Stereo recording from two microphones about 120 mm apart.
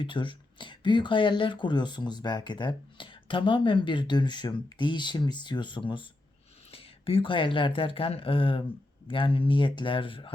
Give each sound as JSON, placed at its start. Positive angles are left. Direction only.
{"t": 0.0, "sound": "speech", "side_deg": 40}